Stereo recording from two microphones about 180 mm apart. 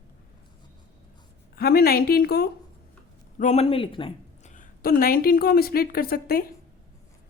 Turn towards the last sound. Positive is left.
turn(degrees=55)  # may be behind; listen again after turning